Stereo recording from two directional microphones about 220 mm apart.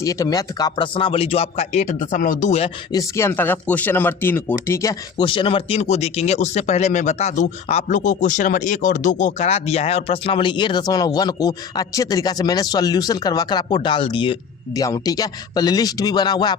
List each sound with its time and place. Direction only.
0.0 s speech: 15° left (ahead or behind); by 2.6 s 30° left (ahead or behind)
2.9 s speech: 15° left (ahead or behind)